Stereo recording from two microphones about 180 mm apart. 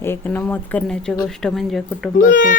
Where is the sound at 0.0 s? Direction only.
10° left (ahead or behind).